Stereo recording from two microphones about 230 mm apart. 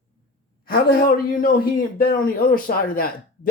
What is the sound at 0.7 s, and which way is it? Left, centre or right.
A man's voice, left.